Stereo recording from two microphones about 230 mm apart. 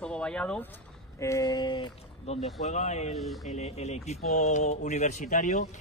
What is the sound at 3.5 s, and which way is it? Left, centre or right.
Speech, left.